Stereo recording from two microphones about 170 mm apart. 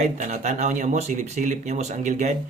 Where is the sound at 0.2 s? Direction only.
45° right (ahead or behind).